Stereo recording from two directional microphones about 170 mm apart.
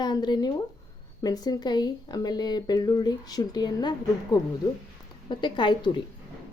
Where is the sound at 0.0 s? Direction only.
25° left (ahead or behind).